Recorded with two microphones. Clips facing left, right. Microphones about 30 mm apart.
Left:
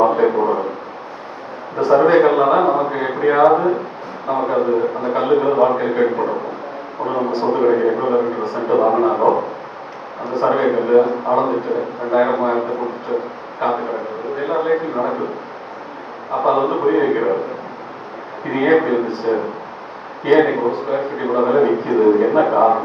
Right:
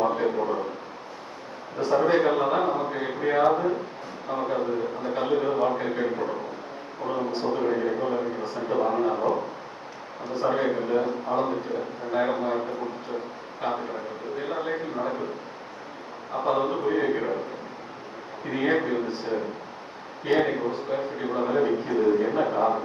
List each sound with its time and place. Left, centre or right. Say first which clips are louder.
0.0 s a sound: left 10 dB; left
1.8 s a man's voice: left 9 dB; centre
7.3 s a man's voice: left 10 dB; centre
7.6 s a man's voice: left 11 dB; left
10.2 s a man's voice: left 8 dB; centre
10.5 s a man's voice: left 12 dB; left
12.1 s a man's voice: left 9 dB; left
16.3 s a man's voice: left 9 dB; left
16.6 s a man's voice: left 9 dB; left
18.4 s a man's voice: left 10 dB; left
19.0 s a man's voice: left 9 dB; centre
20.3 s a man's voice: left 10 dB; left